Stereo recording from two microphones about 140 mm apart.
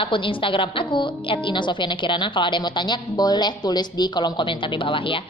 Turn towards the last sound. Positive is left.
turn(degrees=40)  # may be behind; listen again after turning